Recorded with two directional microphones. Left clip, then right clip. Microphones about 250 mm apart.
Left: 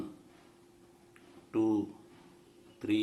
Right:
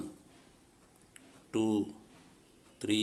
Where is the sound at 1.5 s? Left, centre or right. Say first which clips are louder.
Left 2 dB; right.